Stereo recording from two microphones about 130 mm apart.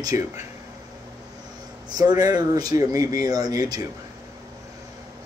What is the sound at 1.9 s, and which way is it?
Speech, 30° right (ahead or behind).